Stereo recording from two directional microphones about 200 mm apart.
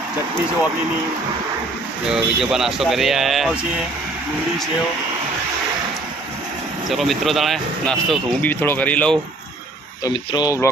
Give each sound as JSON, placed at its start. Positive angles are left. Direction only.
{"t": 2.0, "sound": "speech", "side_deg": -5}
{"t": 6.9, "sound": "speech", "side_deg": 0}
{"t": 10.0, "sound": "speech", "side_deg": 20}